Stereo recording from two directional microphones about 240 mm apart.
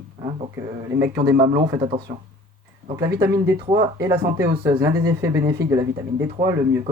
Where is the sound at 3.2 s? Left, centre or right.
Centre.